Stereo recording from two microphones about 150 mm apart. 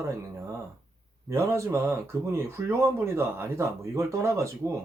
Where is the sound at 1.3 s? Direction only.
20° right (ahead or behind).